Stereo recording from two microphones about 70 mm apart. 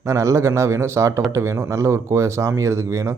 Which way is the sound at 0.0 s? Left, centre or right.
Right.